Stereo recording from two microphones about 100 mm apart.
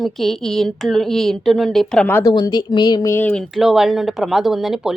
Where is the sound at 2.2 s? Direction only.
40° left (ahead or behind).